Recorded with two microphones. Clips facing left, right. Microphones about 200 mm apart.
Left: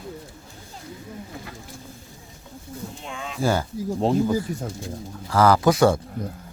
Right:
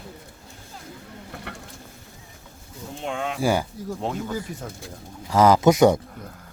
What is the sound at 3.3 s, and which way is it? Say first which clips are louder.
Speech: left 1 dB; 15° right (ahead or behind).